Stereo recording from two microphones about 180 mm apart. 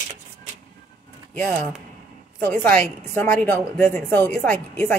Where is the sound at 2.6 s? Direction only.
10° left (ahead or behind).